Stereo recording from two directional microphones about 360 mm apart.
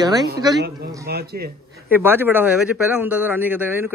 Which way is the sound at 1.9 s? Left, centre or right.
Centre.